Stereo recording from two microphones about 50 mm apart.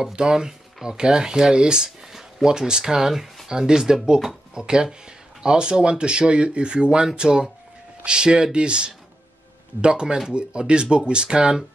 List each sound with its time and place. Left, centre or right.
0.0 s speech: centre